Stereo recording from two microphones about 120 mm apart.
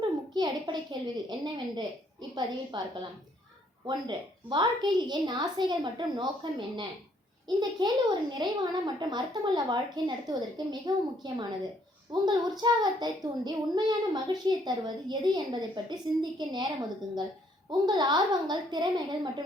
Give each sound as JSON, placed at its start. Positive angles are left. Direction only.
{"t": 0.0, "sound": "a sound", "side_deg": -40}
{"t": 2.3, "sound": "a child's voice", "side_deg": -40}
{"t": 17.7, "sound": "a child's voice", "side_deg": -35}